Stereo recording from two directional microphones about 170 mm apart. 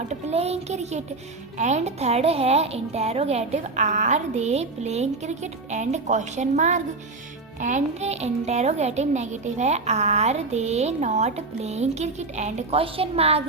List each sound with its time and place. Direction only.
0.1 s a child's voice: 40° right (ahead or behind)